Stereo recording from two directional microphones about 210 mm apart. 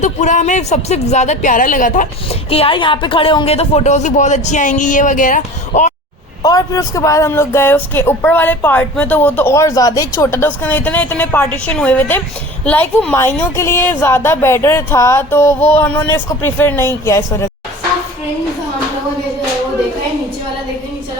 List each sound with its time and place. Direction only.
0.0 s speech: 35° left (ahead or behind)
2.5 s speech: 25° left (ahead or behind)
6.4 s speech: 15° left (ahead or behind)